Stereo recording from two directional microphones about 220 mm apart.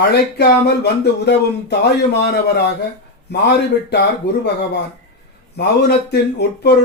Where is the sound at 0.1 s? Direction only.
50° left (ahead or behind).